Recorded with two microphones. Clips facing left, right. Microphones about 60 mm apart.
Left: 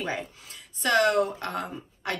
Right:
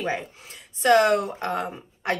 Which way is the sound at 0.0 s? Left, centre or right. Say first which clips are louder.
Right 4 dB; right.